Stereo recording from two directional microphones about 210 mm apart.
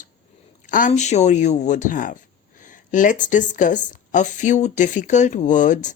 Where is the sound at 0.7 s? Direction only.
35° left (ahead or behind).